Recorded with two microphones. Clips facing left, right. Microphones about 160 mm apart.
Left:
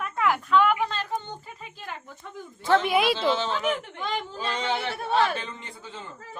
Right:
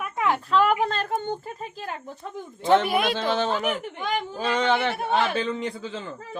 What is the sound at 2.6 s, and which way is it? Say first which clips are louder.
Speech: right 3 dB; 20° right (ahead or behind).